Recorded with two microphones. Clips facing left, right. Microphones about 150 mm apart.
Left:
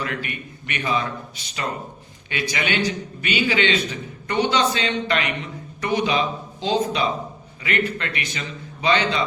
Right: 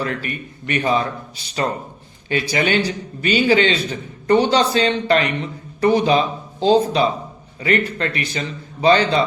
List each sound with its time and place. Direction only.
0.0 s a man's voice: 35° right (ahead or behind)